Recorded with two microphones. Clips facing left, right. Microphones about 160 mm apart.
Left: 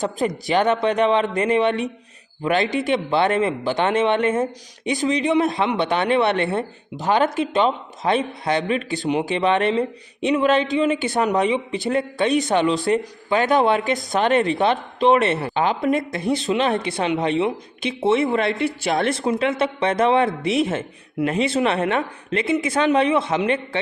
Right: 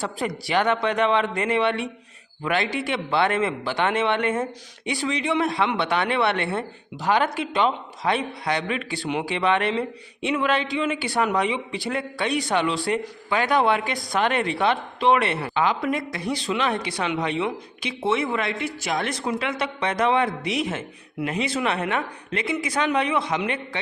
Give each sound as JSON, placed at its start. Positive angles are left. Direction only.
{"t": 0.0, "sound": "speech", "side_deg": 20}